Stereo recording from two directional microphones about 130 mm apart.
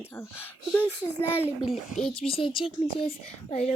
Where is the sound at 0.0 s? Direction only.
15° left (ahead or behind).